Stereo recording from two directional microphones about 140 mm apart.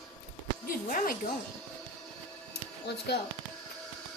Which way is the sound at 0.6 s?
90° left.